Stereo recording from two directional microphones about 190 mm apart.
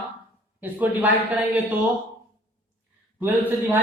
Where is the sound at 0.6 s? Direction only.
10° right (ahead or behind).